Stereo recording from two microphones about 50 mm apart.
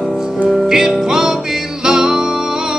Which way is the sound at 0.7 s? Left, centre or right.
Centre.